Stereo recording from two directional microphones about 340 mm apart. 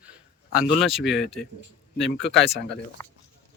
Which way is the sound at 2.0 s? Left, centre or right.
Left.